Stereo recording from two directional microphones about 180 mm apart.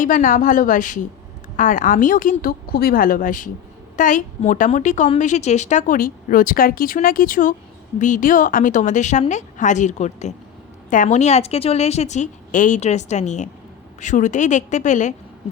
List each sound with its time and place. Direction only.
0.0 s a woman's voice: 45° left (ahead or behind)